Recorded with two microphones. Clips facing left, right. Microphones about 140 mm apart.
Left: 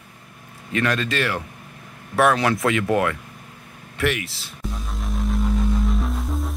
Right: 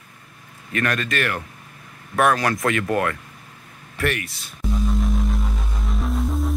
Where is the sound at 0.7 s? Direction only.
20° left (ahead or behind).